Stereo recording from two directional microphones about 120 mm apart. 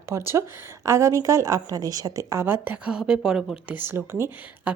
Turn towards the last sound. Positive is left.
turn(degrees=-20)  # may be behind; listen again after turning